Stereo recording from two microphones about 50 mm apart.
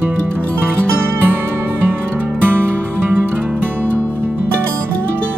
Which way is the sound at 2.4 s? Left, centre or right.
Right.